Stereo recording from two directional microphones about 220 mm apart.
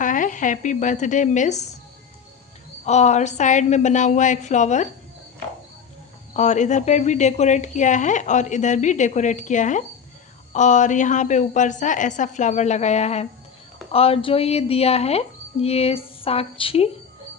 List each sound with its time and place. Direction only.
0.0 s speech: 35° left (ahead or behind)
2.8 s speech: 30° left (ahead or behind)
6.3 s speech: 35° left (ahead or behind)